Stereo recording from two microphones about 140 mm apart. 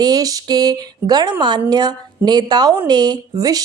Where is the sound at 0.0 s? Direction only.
30° right (ahead or behind).